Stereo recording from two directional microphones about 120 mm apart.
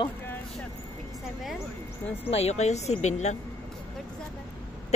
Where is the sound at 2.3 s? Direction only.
60° left (ahead or behind).